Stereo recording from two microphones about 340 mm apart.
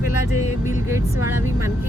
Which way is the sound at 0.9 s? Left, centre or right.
Centre.